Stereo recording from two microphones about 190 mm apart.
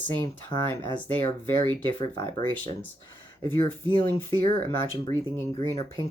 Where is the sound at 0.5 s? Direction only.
20° left (ahead or behind).